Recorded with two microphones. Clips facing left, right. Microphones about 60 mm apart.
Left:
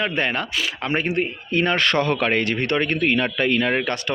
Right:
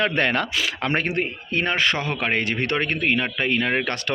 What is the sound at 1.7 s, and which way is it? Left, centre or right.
Speech, centre.